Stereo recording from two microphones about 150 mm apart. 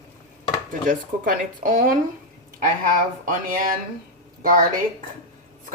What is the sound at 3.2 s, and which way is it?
Speech, 70° right (ahead or behind).